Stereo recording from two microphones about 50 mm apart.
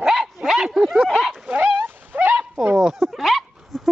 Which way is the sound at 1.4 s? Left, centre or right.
Right.